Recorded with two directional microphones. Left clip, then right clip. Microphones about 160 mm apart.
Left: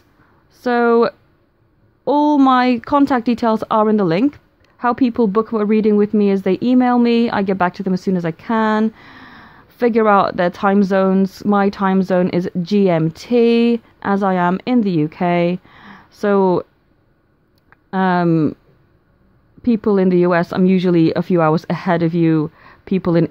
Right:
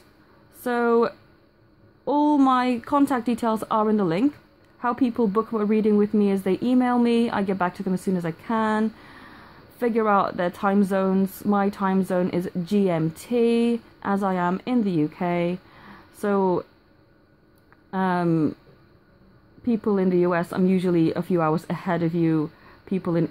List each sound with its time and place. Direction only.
0.6 s speech: 45° left (ahead or behind)
17.6 s speech: 50° left (ahead or behind)
19.6 s speech: 45° left (ahead or behind)